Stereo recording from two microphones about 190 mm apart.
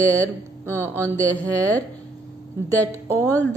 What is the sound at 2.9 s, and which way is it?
Speech, 15° right (ahead or behind).